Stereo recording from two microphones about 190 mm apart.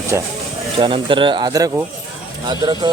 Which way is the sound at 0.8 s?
25° right (ahead or behind).